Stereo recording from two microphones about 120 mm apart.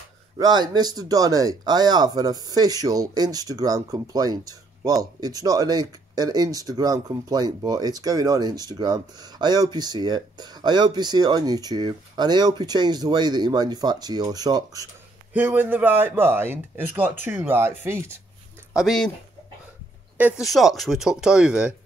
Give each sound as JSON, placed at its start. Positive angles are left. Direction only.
{"t": 0.4, "sound": "speech", "side_deg": -35}
{"t": 15.3, "sound": "speech", "side_deg": -15}
{"t": 18.7, "sound": "speech", "side_deg": -5}
{"t": 20.2, "sound": "speech", "side_deg": -15}
{"t": 20.4, "sound": "speech", "side_deg": 0}